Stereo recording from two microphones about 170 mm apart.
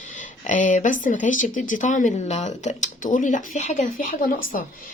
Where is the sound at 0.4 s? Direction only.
50° left (ahead or behind).